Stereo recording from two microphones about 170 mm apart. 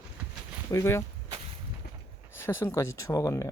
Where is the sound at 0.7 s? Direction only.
15° left (ahead or behind).